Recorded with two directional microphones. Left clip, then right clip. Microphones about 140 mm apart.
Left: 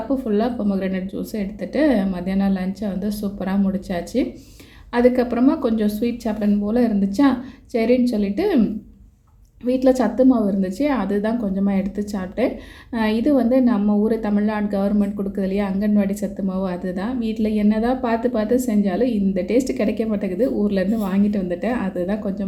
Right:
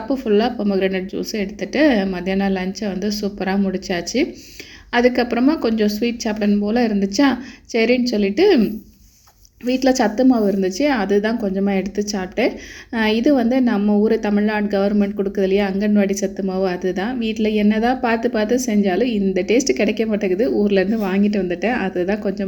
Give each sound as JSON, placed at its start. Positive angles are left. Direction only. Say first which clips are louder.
{"t": 0.1, "sound": "a woman's voice", "louder": "right 5 dB", "side_deg": -15}
{"t": 9.6, "sound": "a woman's voice", "louder": "right 1 dB", "side_deg": -15}